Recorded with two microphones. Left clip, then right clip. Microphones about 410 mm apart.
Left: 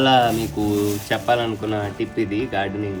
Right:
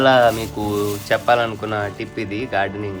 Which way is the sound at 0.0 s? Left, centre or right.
Centre.